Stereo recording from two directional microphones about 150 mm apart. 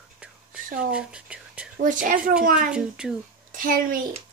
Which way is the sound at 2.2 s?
5° right (ahead or behind).